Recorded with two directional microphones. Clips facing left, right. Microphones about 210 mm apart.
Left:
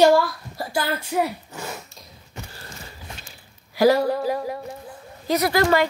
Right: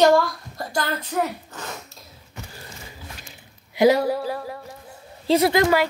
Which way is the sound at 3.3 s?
20° right (ahead or behind).